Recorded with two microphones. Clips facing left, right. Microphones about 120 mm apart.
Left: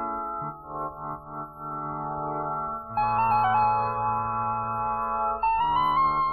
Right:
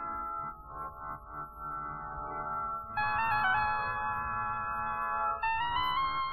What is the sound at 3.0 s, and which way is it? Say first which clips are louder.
Music: left 9 dB; 40° left (ahead or behind).